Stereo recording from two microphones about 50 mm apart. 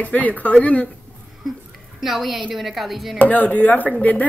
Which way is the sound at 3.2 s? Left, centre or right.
Left.